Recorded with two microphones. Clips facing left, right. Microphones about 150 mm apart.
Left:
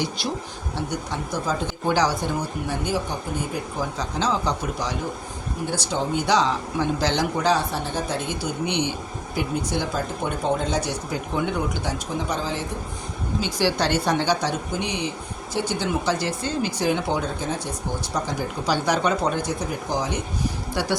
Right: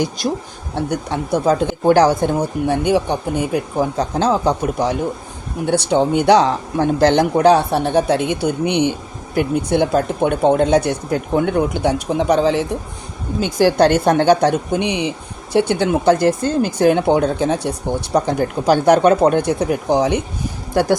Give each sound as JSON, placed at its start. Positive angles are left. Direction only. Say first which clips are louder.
{"t": 0.2, "sound": "speech", "louder": "right 7 dB", "side_deg": -45}
{"t": 0.8, "sound": "speech", "louder": "right 8 dB", "side_deg": -60}
{"t": 5.6, "sound": "speech", "louder": "right 11 dB", "side_deg": -65}
{"t": 13.4, "sound": "speech", "louder": "right 10 dB", "side_deg": -50}
{"t": 20.7, "sound": "speech", "louder": "right 12 dB", "side_deg": -50}